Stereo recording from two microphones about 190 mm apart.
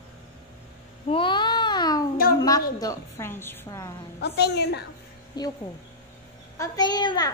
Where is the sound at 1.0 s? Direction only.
25° left (ahead or behind).